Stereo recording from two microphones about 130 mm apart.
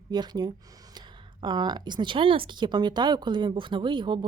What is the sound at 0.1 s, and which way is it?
Speech, 30° right (ahead or behind).